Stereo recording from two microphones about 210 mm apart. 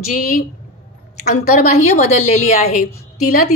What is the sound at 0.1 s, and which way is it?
A woman's voice, 40° left (ahead or behind).